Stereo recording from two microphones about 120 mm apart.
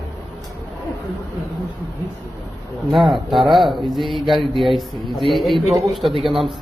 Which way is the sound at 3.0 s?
45° right (ahead or behind).